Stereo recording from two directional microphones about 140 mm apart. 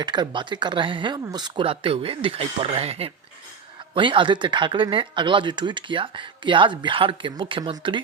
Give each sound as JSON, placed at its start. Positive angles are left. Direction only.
{"t": 0.0, "sound": "speech", "side_deg": -30}